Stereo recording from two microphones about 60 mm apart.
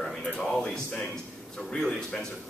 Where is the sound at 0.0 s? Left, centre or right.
Centre.